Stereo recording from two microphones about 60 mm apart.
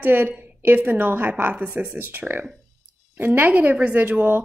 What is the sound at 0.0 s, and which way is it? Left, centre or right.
Speech, right.